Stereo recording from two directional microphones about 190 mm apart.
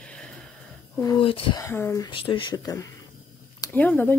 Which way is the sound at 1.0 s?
25° left (ahead or behind).